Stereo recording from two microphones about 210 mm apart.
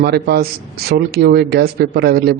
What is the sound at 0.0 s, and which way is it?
A man's voice, 50° right (ahead or behind).